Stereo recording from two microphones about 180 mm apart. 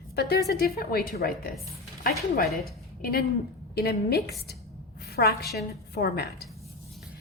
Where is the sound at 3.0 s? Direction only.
55° left (ahead or behind).